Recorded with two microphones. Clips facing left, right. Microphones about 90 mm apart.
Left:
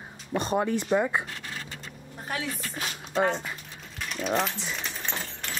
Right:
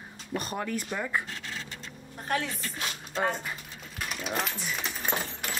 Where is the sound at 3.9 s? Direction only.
5° right (ahead or behind).